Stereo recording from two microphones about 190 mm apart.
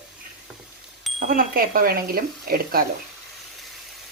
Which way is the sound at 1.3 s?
50° right (ahead or behind).